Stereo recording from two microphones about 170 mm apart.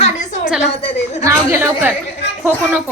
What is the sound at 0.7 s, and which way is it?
Speech, 35° left (ahead or behind).